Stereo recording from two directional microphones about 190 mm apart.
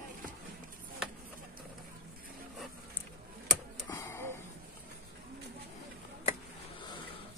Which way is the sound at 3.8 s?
15° left (ahead or behind).